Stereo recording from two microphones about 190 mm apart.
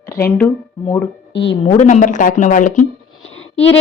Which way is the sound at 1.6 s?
35° left (ahead or behind).